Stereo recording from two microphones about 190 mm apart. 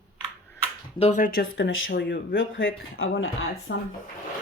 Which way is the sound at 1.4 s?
85° left.